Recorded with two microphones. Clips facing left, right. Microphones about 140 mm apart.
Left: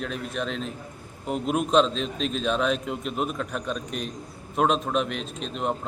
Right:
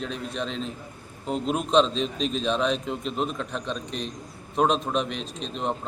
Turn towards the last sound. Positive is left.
turn(degrees=5)  # may be behind; listen again after turning